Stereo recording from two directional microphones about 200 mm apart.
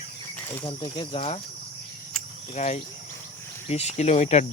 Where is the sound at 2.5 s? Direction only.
35° left (ahead or behind).